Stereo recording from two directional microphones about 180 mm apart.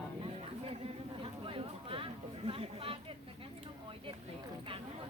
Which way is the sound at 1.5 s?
30° right (ahead or behind).